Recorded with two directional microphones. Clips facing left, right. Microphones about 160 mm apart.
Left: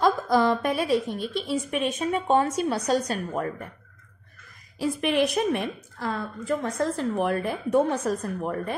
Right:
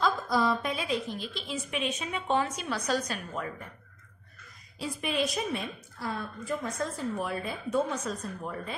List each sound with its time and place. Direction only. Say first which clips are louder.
0.0 s a sound: left 6 dB; 55° left (ahead or behind)
1.6 s a woman's voice: left 6 dB; 50° left (ahead or behind)
4.8 s a woman's voice: left 7 dB; 65° left (ahead or behind)